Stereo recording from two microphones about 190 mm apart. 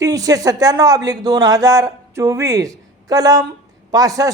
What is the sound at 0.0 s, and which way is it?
Speech, 20° right (ahead or behind).